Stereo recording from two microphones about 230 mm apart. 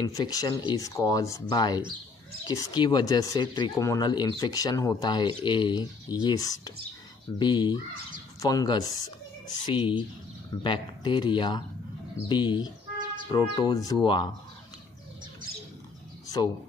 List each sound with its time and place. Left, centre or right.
0.0 s speech: centre